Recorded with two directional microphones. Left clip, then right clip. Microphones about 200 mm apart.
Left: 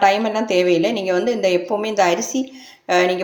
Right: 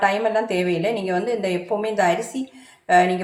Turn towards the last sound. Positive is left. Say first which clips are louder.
# even
turn(degrees=40)  # may be behind; listen again after turning